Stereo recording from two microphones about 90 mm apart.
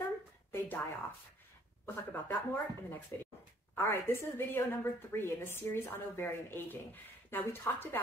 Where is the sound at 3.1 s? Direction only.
25° left (ahead or behind).